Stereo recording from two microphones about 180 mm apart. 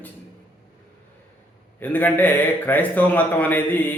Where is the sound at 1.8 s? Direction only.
10° left (ahead or behind).